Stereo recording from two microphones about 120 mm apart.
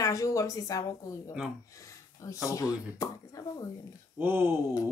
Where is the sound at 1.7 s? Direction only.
25° left (ahead or behind).